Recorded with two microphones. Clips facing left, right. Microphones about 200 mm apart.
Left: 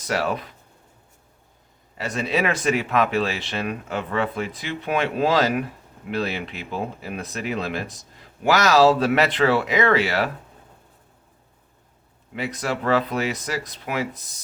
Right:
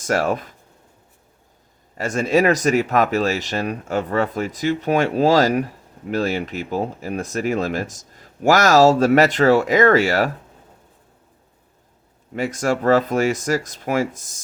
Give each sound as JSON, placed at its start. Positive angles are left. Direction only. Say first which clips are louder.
{"t": 0.0, "sound": "speech", "louder": "right 4 dB", "side_deg": -45}
{"t": 2.0, "sound": "speech", "louder": "right 6 dB", "side_deg": -45}
{"t": 12.3, "sound": "speech", "louder": "right 6 dB", "side_deg": -45}